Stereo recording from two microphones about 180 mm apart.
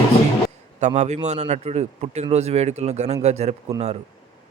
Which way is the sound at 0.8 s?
40° right (ahead or behind).